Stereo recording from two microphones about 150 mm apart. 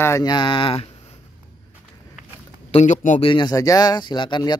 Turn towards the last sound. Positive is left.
turn(degrees=30)  # may be behind; listen again after turning